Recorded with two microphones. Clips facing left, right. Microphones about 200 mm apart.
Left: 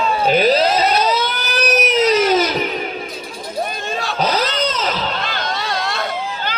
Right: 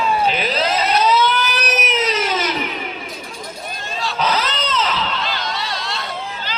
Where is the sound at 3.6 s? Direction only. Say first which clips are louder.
Left 3 dB; 55° left (ahead or behind).